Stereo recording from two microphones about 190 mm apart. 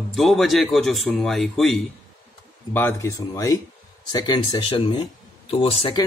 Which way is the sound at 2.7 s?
10° left (ahead or behind).